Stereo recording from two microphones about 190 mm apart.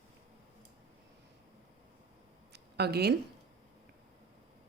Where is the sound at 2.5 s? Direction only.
60° right (ahead or behind).